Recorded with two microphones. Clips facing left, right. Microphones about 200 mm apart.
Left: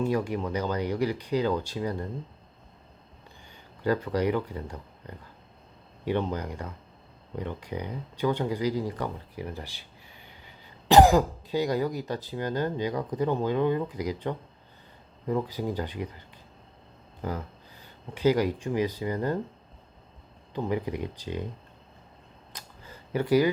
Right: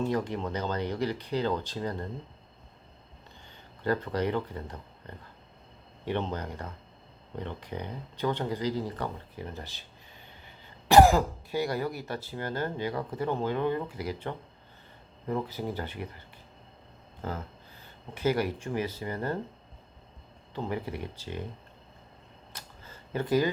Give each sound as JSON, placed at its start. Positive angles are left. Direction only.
{"t": 0.0, "sound": "speech", "side_deg": 10}
{"t": 3.8, "sound": "speech", "side_deg": 10}
{"t": 17.2, "sound": "speech", "side_deg": 15}
{"t": 20.5, "sound": "speech", "side_deg": 15}
{"t": 22.5, "sound": "a sound", "side_deg": 15}